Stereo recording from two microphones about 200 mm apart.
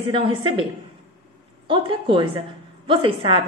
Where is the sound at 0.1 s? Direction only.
25° right (ahead or behind).